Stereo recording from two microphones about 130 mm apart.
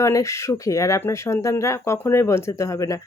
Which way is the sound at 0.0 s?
25° left (ahead or behind).